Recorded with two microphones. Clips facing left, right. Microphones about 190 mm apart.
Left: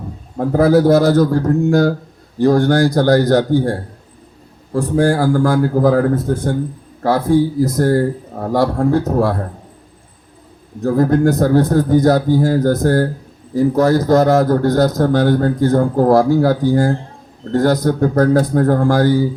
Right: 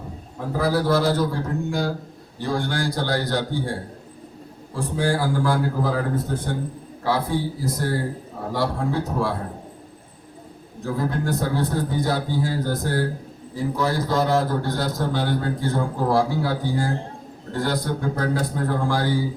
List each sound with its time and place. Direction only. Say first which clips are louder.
0.3 s a man's voice: left 11 dB; 45° left (ahead or behind)
10.8 s a man's voice: left 11 dB; 45° left (ahead or behind)